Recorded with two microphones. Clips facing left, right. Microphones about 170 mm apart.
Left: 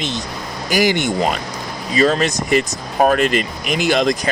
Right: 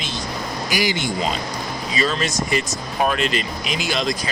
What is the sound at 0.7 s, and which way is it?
Speech, 45° left (ahead or behind).